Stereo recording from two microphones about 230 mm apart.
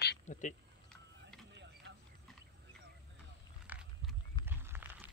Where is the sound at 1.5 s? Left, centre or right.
Right.